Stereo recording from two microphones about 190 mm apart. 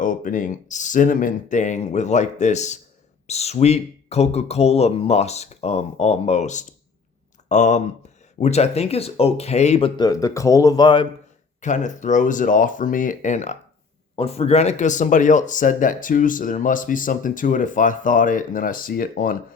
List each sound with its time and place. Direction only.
0.0 s speech: 45° left (ahead or behind)
10.0 s speech: 15° left (ahead or behind)
11.6 s speech: 40° left (ahead or behind)